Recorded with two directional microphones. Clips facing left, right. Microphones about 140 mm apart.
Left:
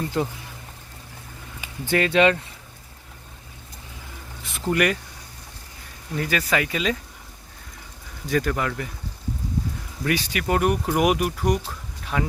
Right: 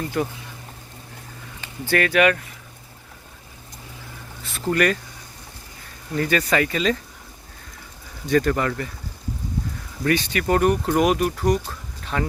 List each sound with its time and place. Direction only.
0.1 s speech: 20° left (ahead or behind)
1.6 s speech: 20° left (ahead or behind)
4.4 s speech: 15° left (ahead or behind)
6.1 s speech: 5° left (ahead or behind)
8.3 s speech: 5° left (ahead or behind)
10.0 s speech: 5° left (ahead or behind)
11.6 s a sound: 5° left (ahead or behind)